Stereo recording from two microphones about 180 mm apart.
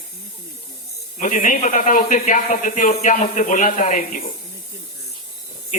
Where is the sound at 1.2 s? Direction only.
45° left (ahead or behind).